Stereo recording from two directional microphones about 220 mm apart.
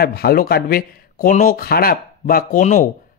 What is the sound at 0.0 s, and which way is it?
Speech, 45° left (ahead or behind).